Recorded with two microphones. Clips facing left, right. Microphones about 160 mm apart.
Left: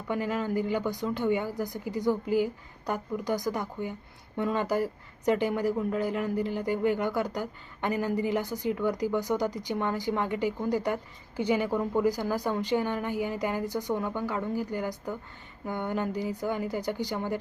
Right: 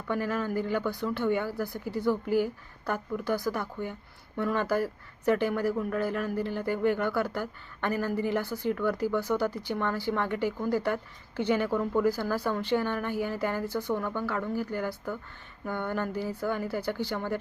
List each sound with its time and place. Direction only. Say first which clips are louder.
0.1 s speech: even; 15° left (ahead or behind)